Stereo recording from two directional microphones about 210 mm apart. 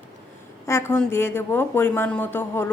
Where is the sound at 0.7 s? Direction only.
10° left (ahead or behind).